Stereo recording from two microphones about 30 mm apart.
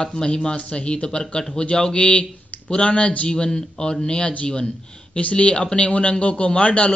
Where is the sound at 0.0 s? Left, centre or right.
Left.